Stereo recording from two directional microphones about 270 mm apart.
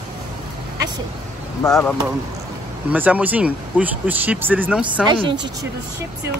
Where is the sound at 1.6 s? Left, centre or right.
Centre.